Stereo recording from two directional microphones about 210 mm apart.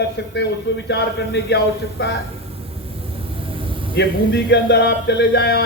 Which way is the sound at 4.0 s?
55° left (ahead or behind).